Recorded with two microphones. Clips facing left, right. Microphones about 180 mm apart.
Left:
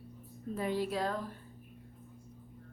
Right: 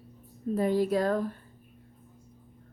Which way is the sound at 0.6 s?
40° right (ahead or behind).